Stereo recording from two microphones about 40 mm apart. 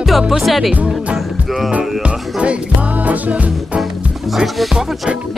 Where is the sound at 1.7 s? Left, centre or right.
Right.